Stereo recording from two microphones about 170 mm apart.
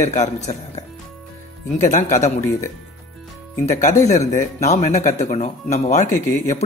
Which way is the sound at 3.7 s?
45° left (ahead or behind).